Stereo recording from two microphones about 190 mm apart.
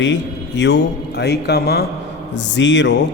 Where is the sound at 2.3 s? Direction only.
70° left (ahead or behind).